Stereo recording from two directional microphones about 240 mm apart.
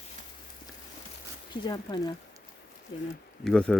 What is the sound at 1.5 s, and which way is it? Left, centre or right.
Speech, centre.